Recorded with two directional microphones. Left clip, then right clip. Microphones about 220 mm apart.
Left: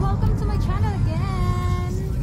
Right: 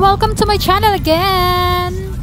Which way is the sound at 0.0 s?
40° right (ahead or behind).